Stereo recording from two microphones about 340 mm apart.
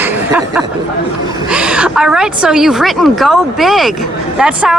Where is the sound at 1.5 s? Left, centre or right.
Centre.